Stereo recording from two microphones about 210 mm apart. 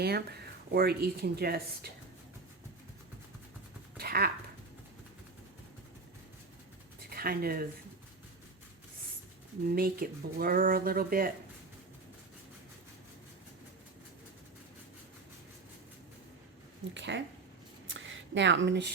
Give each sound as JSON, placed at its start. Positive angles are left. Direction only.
{"t": 0.0, "sound": "speech", "side_deg": -50}
{"t": 3.9, "sound": "a sound", "side_deg": -50}
{"t": 7.1, "sound": "speech", "side_deg": -45}
{"t": 9.6, "sound": "speech", "side_deg": -45}
{"t": 16.9, "sound": "speech", "side_deg": -55}
{"t": 17.8, "sound": "a sound", "side_deg": -65}